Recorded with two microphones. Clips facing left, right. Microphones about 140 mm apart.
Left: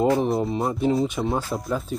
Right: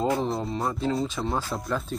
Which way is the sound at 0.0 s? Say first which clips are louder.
Left 5 dB; 20° left (ahead or behind).